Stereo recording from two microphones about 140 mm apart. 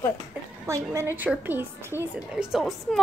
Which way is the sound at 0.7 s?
20° right (ahead or behind).